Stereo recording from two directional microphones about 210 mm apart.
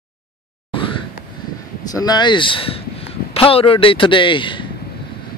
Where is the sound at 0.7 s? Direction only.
25° left (ahead or behind).